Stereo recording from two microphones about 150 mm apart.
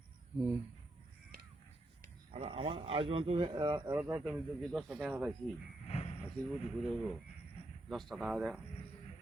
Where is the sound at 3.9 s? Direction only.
15° right (ahead or behind).